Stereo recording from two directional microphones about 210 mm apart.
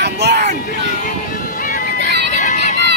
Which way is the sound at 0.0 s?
50° right (ahead or behind).